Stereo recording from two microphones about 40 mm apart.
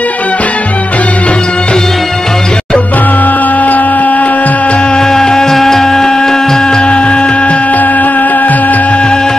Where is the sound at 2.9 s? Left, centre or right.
Left.